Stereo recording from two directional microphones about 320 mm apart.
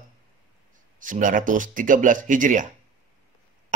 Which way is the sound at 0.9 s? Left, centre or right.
Right.